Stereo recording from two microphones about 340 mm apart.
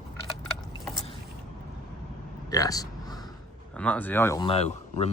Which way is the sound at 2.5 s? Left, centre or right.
Centre.